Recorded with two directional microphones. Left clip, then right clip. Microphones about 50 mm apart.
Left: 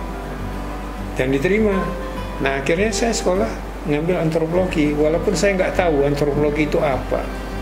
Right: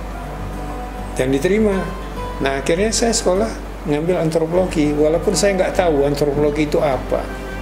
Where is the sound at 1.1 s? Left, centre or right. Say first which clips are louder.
Right 1 dB; right.